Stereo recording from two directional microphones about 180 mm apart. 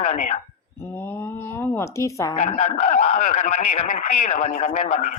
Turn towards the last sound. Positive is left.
turn(degrees=40)  # may be behind; listen again after turning